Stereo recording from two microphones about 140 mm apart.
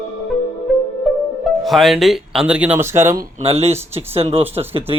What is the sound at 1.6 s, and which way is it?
Speech, centre (ahead or behind).